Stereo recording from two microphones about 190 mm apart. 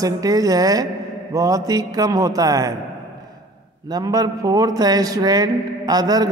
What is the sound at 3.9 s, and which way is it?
A man's voice, 20° right (ahead or behind).